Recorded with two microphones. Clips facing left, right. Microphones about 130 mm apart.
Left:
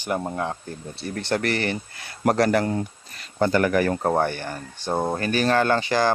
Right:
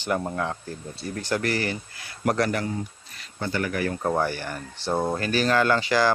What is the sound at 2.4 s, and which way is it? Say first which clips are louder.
Speech: left 6 dB; 55° left (ahead or behind).